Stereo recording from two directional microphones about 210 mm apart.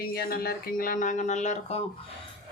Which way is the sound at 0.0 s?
45° left (ahead or behind).